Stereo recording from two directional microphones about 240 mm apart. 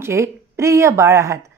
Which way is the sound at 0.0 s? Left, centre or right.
Centre.